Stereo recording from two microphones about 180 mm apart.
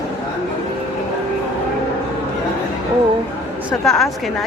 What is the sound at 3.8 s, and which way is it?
Speech, centre (ahead or behind).